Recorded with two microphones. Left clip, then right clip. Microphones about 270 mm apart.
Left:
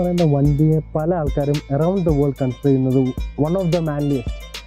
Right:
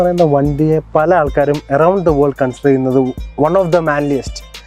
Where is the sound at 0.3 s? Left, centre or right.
Centre.